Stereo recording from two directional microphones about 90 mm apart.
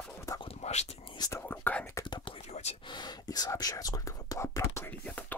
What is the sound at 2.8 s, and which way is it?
Speech, 55° left (ahead or behind).